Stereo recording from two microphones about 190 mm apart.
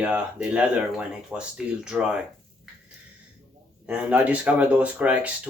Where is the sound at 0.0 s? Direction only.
5° right (ahead or behind).